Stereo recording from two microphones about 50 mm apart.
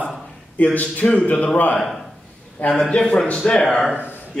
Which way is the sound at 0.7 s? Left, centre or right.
Left.